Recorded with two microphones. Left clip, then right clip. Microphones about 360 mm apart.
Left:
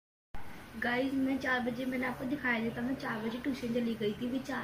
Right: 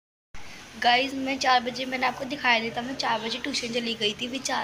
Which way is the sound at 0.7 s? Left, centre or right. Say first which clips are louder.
Right 10 dB; right.